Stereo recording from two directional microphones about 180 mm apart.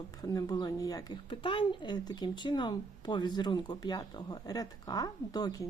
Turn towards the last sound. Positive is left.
turn(degrees=20)  # may be behind; listen again after turning